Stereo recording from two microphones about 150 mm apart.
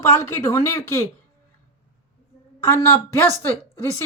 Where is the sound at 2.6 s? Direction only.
20° left (ahead or behind).